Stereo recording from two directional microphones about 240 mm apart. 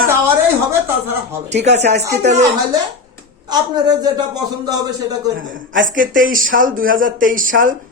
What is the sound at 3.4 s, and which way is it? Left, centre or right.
A man's voice, centre.